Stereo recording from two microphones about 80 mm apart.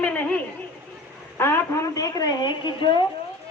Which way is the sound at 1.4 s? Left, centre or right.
Left.